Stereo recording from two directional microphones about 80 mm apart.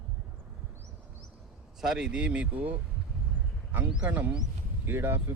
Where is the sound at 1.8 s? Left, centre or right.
Centre.